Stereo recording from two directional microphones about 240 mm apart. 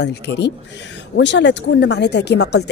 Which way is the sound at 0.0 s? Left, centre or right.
Left.